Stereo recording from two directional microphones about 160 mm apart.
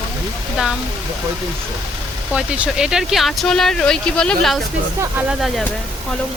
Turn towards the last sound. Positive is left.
turn(degrees=0)  # may be behind; listen again after turning